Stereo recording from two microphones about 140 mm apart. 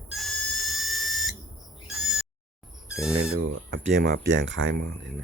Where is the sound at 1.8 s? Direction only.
Centre (ahead or behind).